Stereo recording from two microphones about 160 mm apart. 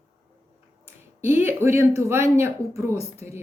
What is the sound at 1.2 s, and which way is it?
Speech, 15° right (ahead or behind).